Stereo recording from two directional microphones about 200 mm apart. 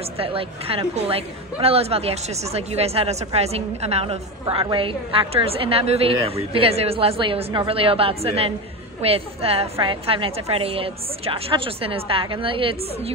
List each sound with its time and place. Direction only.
0.2 s a woman's voice: 30° right (ahead or behind)